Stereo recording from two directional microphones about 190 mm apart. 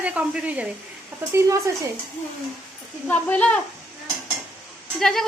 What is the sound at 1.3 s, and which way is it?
Speech, 15° right (ahead or behind).